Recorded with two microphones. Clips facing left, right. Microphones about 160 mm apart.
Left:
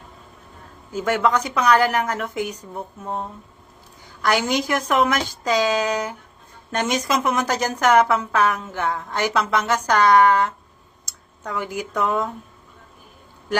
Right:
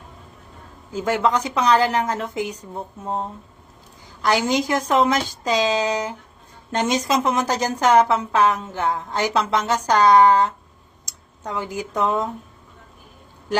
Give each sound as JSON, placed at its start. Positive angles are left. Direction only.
{"t": 1.0, "sound": "a woman's voice", "side_deg": -15}
{"t": 4.2, "sound": "a woman's voice", "side_deg": -15}
{"t": 4.9, "sound": "a woman's voice", "side_deg": -30}
{"t": 5.4, "sound": "a woman's voice", "side_deg": -20}
{"t": 9.3, "sound": "a woman's voice", "side_deg": -30}
{"t": 9.7, "sound": "a woman's voice", "side_deg": -15}